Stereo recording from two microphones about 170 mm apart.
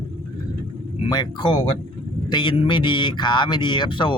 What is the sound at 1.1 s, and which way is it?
A man's voice, 25° left (ahead or behind).